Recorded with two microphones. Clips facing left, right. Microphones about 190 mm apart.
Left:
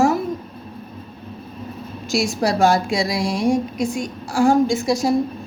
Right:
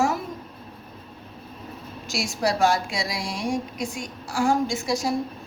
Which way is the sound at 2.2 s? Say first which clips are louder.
Left 4 dB; 30° left (ahead or behind).